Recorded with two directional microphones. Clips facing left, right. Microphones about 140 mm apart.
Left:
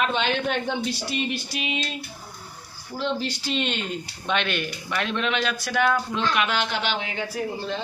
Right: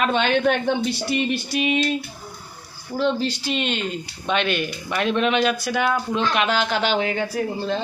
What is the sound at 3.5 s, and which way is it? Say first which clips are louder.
Speech: right 2 dB; 5° right (ahead or behind).